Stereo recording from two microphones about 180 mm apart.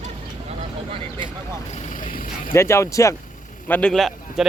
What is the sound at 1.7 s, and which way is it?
Speech, 40° left (ahead or behind).